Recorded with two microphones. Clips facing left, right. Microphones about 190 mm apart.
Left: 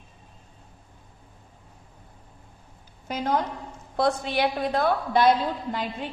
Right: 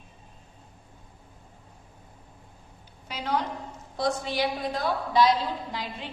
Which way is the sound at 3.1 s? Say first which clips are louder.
Left 4 dB; 50° left (ahead or behind).